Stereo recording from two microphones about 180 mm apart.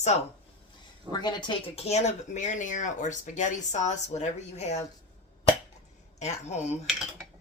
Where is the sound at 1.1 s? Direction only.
25° left (ahead or behind); by 4.8 s 40° left (ahead or behind).